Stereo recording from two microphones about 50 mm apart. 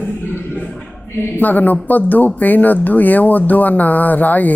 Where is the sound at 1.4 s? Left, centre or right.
Left.